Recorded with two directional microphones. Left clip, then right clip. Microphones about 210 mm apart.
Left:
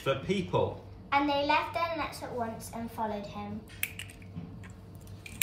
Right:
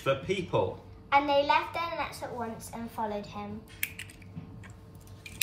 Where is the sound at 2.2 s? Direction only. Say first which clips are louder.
Left 1 dB; 30° right (ahead or behind).